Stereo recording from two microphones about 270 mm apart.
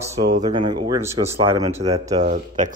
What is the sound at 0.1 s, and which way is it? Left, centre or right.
Speech, centre.